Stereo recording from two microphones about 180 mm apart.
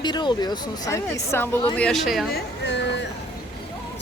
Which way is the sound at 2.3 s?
70° left (ahead or behind).